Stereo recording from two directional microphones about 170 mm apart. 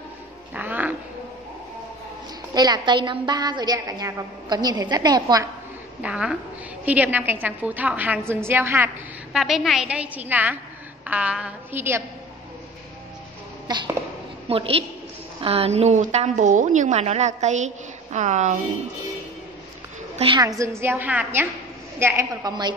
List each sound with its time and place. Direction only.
0.6 s a sound: 10° right (ahead or behind)
2.5 s a woman's voice: 25° right (ahead or behind)
6.0 s a woman's voice: 5° right (ahead or behind)
9.4 s a woman's voice: centre (ahead or behind)
13.7 s a woman's voice: 25° right (ahead or behind); by 18.6 s 45° right (ahead or behind)
20.2 s a woman's voice: 25° right (ahead or behind)